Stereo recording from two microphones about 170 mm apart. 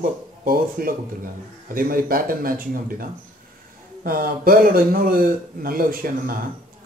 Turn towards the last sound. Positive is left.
turn(degrees=-55)  # may be behind; listen again after turning